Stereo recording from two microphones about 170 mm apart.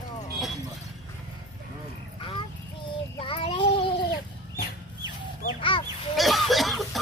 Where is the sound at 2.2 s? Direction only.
30° left (ahead or behind).